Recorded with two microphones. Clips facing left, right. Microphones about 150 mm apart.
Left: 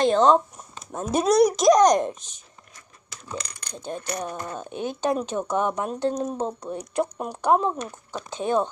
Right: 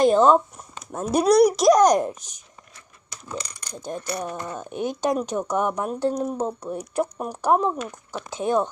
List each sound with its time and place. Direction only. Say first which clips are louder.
0.0 s a child's voice: right 2 dB; 10° right (ahead or behind)
3.7 s a child's voice: right 1 dB; 10° right (ahead or behind)